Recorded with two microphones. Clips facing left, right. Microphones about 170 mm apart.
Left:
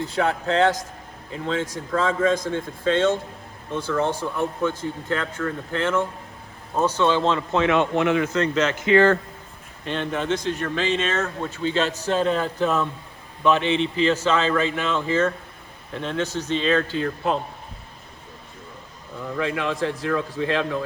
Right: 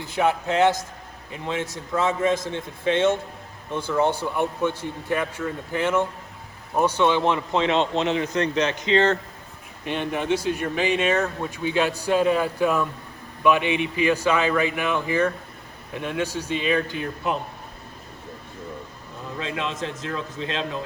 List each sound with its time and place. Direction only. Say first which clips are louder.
0.2 s speech: right 1 dB; 20° right (ahead or behind)
19.4 s speech: left 5 dB; 20° right (ahead or behind)